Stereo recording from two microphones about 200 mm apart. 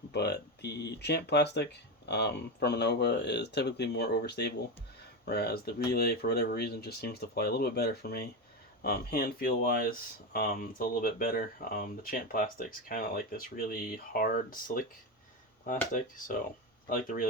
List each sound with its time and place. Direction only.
0.1 s speech: 55° left (ahead or behind)
15.9 s speech: 40° left (ahead or behind)